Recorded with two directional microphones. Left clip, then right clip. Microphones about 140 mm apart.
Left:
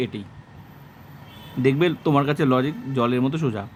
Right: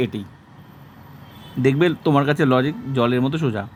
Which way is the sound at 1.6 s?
15° right (ahead or behind).